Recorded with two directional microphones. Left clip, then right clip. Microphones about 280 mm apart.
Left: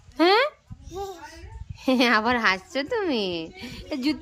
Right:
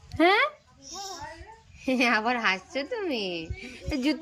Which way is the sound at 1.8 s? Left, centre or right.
Centre.